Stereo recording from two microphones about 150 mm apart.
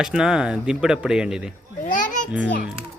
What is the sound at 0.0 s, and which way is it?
A man's voice, 5° right (ahead or behind).